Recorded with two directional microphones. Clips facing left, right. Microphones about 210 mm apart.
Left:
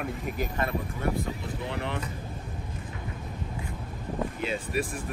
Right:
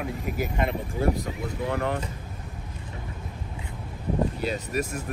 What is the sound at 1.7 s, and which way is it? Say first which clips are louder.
Speech: right 6 dB; 45° right (ahead or behind).